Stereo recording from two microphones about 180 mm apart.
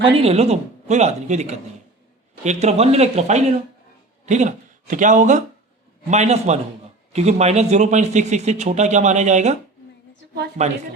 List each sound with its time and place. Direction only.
0.0 s speech: 35° right (ahead or behind)
10.6 s speech: 35° right (ahead or behind)